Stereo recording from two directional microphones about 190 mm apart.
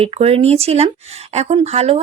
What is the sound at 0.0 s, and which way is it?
Speech, 30° right (ahead or behind).